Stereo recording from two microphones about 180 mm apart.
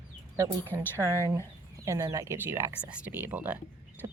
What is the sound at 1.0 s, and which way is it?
A woman's voice, 15° right (ahead or behind).